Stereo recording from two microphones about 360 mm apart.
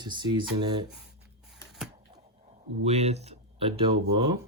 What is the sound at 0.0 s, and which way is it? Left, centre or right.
Speech, centre.